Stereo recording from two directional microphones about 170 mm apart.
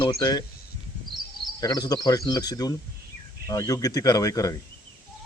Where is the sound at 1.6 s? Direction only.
20° left (ahead or behind).